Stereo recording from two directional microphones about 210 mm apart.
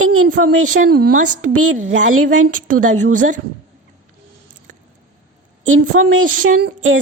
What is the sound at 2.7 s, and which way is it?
Speech, 40° right (ahead or behind).